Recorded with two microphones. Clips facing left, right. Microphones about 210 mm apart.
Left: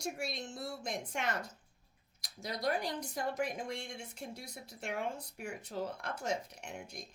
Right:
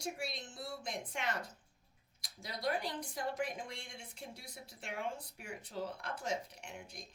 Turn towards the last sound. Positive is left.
turn(degrees=45)  # may be behind; listen again after turning